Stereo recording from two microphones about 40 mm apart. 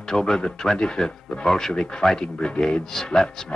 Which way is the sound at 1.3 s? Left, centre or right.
Centre.